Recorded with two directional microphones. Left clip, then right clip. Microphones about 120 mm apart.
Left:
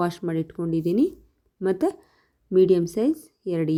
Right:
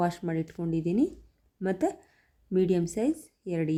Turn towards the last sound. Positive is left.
turn(degrees=20)  # may be behind; listen again after turning